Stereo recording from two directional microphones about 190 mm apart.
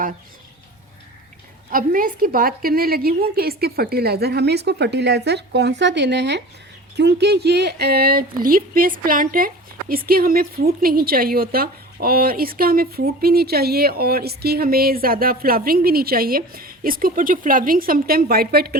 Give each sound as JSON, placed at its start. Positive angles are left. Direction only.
{"t": 1.7, "sound": "a woman's voice", "side_deg": -45}